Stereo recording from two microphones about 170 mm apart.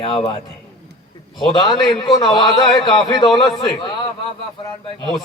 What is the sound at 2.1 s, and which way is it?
A man's voice, 25° left (ahead or behind).